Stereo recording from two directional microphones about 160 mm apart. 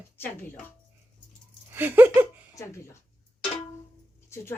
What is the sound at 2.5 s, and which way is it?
Speech, 20° left (ahead or behind).